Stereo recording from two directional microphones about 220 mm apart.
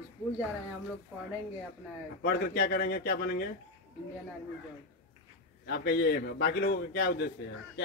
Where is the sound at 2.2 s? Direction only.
45° left (ahead or behind).